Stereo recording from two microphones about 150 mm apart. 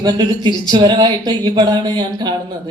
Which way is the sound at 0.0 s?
30° right (ahead or behind).